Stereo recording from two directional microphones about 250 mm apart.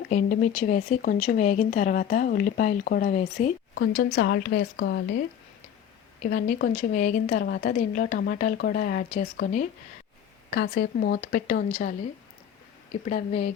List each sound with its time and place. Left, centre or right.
0.1 s a woman's voice: left
4.1 s a woman's voice: left
6.2 s a woman's voice: left
13.1 s speech: left